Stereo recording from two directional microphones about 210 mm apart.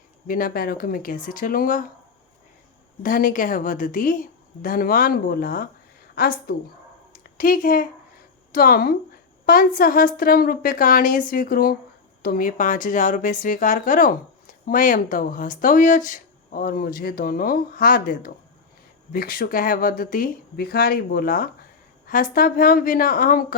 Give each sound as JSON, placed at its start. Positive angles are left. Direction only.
{"t": 0.3, "sound": "a woman's voice", "side_deg": 40}
{"t": 3.0, "sound": "a woman's voice", "side_deg": 40}
{"t": 7.1, "sound": "a sound", "side_deg": 40}
{"t": 8.5, "sound": "a woman's voice", "side_deg": 45}